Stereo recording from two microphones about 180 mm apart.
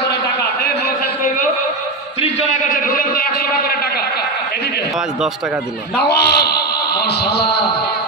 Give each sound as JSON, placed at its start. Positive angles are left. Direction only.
{"t": 2.7, "sound": "a man's voice", "side_deg": 55}
{"t": 6.0, "sound": "a man's voice", "side_deg": 65}